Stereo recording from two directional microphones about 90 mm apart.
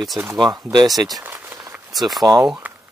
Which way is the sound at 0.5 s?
50° right (ahead or behind).